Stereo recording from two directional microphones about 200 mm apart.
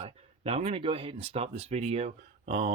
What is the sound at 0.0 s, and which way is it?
Speech, 30° right (ahead or behind).